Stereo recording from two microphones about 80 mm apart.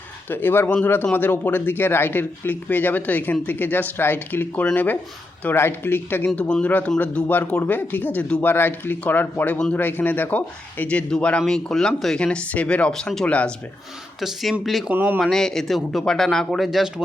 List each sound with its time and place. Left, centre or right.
0.3 s speech: left; by 14.8 s centre
14.9 s speech: right
15.2 s speech: centre